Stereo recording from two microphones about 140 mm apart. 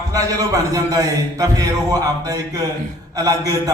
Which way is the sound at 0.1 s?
25° right (ahead or behind).